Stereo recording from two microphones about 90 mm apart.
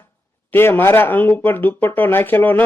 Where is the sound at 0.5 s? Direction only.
25° left (ahead or behind).